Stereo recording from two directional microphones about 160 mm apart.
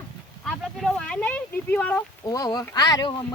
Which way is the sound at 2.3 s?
25° left (ahead or behind).